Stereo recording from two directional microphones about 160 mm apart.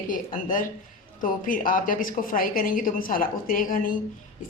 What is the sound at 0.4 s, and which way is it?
Speech, 55° left (ahead or behind).